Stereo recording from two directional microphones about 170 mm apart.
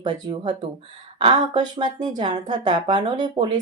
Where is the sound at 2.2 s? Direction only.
25° right (ahead or behind).